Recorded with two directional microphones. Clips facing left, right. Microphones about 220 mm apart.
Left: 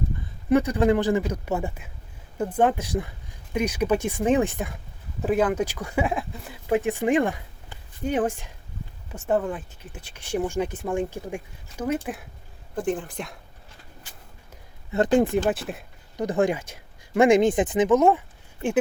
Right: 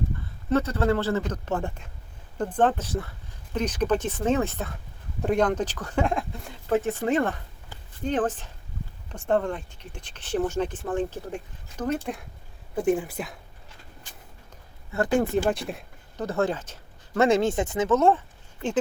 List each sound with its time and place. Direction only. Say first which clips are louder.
0.5 s speech: left 4 dB; 15° left (ahead or behind)
6.7 s speech: left 2 dB; 15° left (ahead or behind)
12.7 s speech: right 3 dB; 10° right (ahead or behind)
14.9 s speech: left 4 dB; 20° left (ahead or behind)
15.4 s speech: left 1 dB; centre (ahead or behind)
16.1 s speech: left 3 dB; 15° left (ahead or behind)